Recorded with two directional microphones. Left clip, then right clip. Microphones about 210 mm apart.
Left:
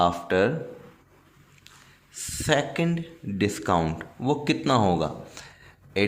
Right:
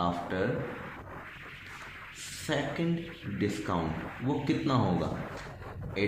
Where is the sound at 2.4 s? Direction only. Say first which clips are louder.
Left 8 dB; 45° left (ahead or behind).